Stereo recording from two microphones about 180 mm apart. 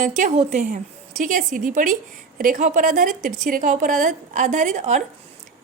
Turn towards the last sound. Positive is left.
turn(degrees=-40)  # may be behind; listen again after turning